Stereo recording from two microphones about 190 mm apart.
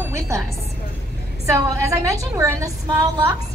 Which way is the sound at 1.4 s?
15° right (ahead or behind).